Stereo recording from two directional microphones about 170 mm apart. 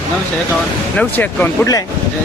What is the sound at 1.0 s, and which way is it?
Speech, 10° left (ahead or behind).